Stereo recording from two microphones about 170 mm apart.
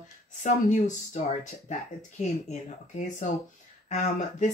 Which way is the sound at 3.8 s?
45° left (ahead or behind).